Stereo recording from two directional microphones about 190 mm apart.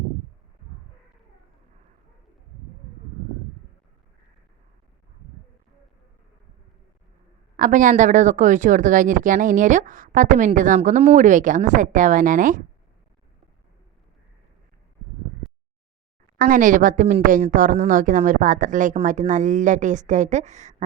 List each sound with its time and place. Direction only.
7.5 s speech: 40° right (ahead or behind)
16.4 s a woman's voice: 45° right (ahead or behind)